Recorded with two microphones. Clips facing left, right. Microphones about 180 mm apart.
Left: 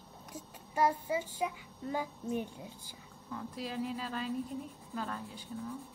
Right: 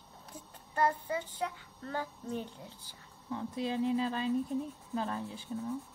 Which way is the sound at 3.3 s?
25° right (ahead or behind).